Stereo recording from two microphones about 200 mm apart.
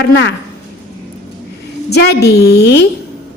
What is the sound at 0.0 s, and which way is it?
Speech, 65° left (ahead or behind).